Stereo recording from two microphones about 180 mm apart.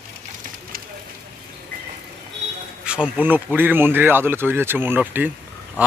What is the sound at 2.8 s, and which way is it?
Speech, 5° right (ahead or behind).